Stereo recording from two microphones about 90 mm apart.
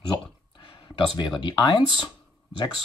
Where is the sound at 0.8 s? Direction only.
60° left (ahead or behind).